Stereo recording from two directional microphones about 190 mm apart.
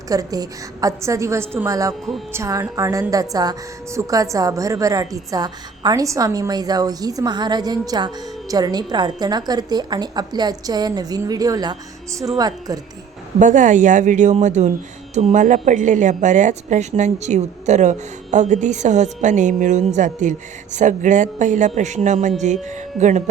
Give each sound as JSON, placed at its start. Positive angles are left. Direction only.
{"t": 0.1, "sound": "a woman's voice", "side_deg": -20}
{"t": 13.4, "sound": "a woman's voice", "side_deg": -40}